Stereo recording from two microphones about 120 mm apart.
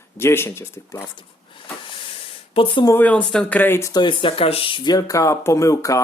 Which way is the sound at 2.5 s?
45° left (ahead or behind).